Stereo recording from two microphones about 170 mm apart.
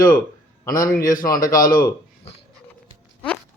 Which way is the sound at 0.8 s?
20° left (ahead or behind).